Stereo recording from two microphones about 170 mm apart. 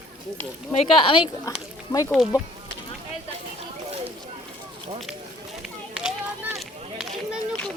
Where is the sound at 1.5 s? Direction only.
20° left (ahead or behind).